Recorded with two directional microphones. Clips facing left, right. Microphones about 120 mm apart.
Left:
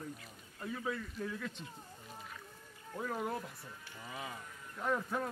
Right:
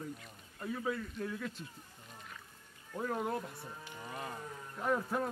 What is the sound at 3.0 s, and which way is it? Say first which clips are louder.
Speech: right 2 dB; centre (ahead or behind).